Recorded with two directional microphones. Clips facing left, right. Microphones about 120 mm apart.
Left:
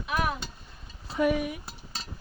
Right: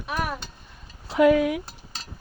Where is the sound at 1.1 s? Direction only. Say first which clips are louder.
Right 8 dB; 90° right.